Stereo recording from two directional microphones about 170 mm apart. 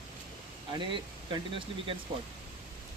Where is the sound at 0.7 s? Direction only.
25° right (ahead or behind).